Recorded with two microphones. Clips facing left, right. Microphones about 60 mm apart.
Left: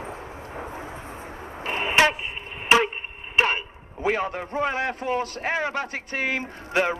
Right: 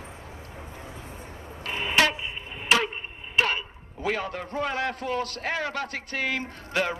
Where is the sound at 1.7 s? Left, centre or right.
Left.